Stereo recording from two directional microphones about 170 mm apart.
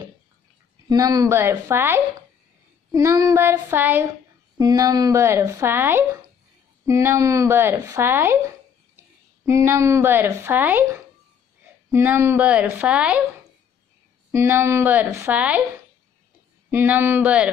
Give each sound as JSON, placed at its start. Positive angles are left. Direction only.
{"t": 0.8, "sound": "a woman's voice", "side_deg": -20}
{"t": 14.3, "sound": "a woman's voice", "side_deg": -15}
{"t": 16.7, "sound": "a woman's voice", "side_deg": -10}